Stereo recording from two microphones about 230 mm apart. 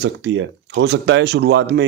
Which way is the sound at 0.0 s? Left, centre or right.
Right.